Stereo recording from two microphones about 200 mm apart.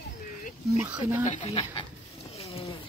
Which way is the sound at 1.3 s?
35° left (ahead or behind).